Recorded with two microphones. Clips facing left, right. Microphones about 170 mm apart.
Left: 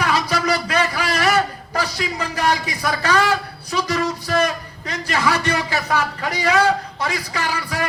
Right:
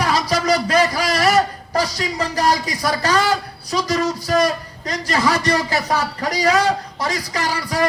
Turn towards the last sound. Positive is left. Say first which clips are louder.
# right 3 dB
turn(degrees=-35)  # may be behind; listen again after turning